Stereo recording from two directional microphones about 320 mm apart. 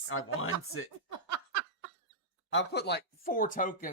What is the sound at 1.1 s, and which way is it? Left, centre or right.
Giggle, right.